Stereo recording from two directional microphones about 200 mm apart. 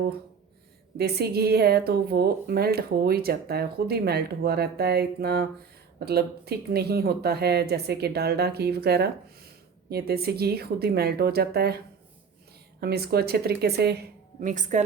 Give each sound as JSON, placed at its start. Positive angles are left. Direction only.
{"t": 0.9, "sound": "a woman's voice", "side_deg": -55}
{"t": 12.8, "sound": "a woman's voice", "side_deg": -50}